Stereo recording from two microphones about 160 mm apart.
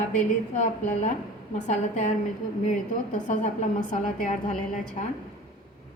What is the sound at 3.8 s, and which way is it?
Speech, 50° left (ahead or behind).